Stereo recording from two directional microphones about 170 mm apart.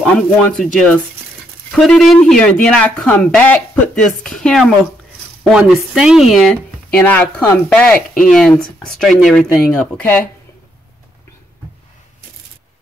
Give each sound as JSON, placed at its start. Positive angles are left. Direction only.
{"t": 0.0, "sound": "a woman's voice", "side_deg": 5}
{"t": 6.9, "sound": "a woman's voice", "side_deg": 10}